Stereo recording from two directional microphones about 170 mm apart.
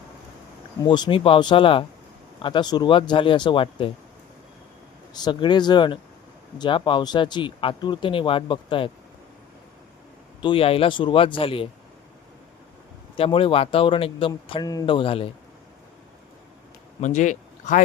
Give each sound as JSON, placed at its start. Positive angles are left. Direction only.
{"t": 0.8, "sound": "speech", "side_deg": 25}
{"t": 5.1, "sound": "speech", "side_deg": 25}
{"t": 10.4, "sound": "speech", "side_deg": 35}
{"t": 13.1, "sound": "speech", "side_deg": 30}
{"t": 17.0, "sound": "speech", "side_deg": 45}